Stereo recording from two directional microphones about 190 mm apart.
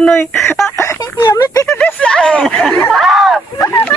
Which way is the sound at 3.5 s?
15° left (ahead or behind).